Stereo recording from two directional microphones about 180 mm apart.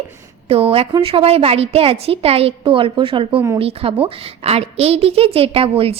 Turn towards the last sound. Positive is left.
turn(degrees=-30)  # may be behind; listen again after turning